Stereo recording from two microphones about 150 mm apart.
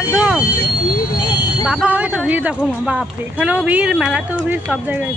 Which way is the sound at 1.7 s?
5° right (ahead or behind).